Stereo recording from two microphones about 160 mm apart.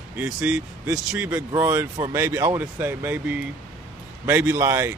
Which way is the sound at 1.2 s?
20° right (ahead or behind).